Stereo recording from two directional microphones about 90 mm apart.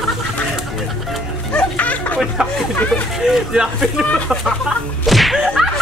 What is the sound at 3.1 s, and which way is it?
Speech, 5° right (ahead or behind).